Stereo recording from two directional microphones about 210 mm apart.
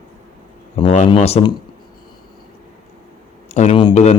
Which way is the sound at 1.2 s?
30° left (ahead or behind).